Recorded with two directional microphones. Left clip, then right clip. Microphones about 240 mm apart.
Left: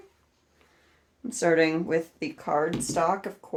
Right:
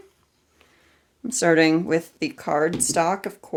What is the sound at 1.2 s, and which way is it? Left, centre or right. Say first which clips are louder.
Speech: right 4 dB; right.